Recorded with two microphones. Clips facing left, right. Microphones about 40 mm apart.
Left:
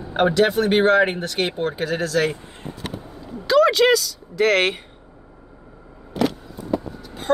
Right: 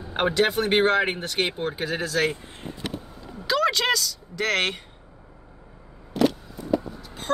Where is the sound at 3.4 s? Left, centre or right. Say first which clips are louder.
Left 7 dB; centre.